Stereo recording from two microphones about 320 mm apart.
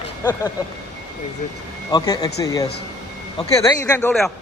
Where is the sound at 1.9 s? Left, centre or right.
Centre.